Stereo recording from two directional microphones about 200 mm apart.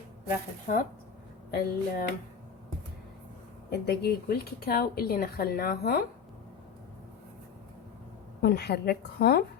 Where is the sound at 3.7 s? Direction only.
55° left (ahead or behind).